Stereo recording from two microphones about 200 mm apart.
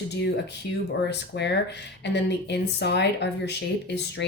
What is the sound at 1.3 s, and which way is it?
Speech, 60° left (ahead or behind).